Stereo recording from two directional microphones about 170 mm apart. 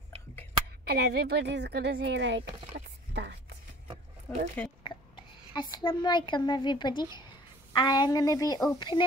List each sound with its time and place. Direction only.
0.8 s a woman's voice: 70° right (ahead or behind); by 2.5 s 90° right
3.1 s a sound: 75° right (ahead or behind)
4.8 s a child's voice: 25° left (ahead or behind)